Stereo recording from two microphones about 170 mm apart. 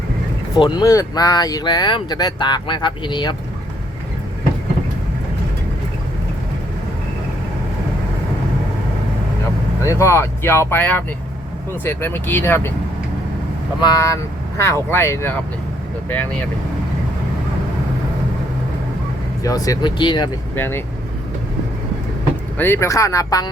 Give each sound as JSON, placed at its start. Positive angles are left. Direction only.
{"t": 0.5, "sound": "speech", "side_deg": 25}
{"t": 9.8, "sound": "speech", "side_deg": 15}
{"t": 13.8, "sound": "speech", "side_deg": 20}
{"t": 19.4, "sound": "speech", "side_deg": 20}
{"t": 20.6, "sound": "speech", "side_deg": 15}
{"t": 22.5, "sound": "speech", "side_deg": 15}